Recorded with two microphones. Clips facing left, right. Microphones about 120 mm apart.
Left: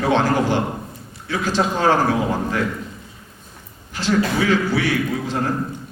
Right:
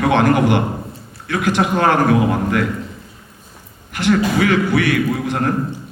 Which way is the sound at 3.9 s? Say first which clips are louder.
Right 3 dB; 60° right (ahead or behind).